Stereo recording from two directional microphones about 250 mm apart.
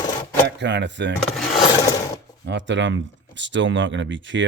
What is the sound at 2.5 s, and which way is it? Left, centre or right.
Speech, right.